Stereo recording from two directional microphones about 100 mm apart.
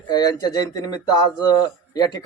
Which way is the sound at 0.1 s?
40° left (ahead or behind).